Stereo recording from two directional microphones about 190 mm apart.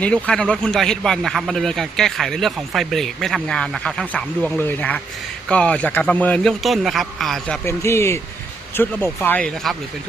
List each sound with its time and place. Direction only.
0.0 s speech: 5° left (ahead or behind)